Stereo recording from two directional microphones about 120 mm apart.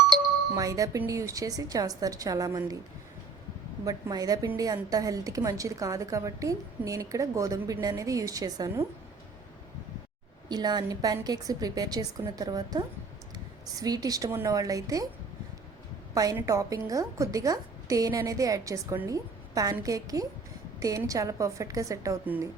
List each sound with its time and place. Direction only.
0.5 s a woman's voice: 30° right (ahead or behind)
3.8 s a woman's voice: 30° right (ahead or behind)
10.5 s a woman's voice: 35° right (ahead or behind)
16.1 s a woman's voice: 30° right (ahead or behind)